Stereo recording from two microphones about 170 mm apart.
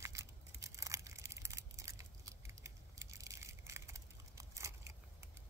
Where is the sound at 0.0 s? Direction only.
15° right (ahead or behind).